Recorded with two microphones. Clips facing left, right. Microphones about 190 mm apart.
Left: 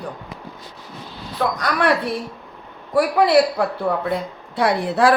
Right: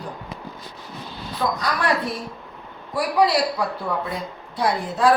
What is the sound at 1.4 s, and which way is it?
A man's voice, 65° left (ahead or behind).